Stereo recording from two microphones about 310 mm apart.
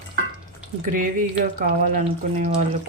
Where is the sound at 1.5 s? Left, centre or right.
Right.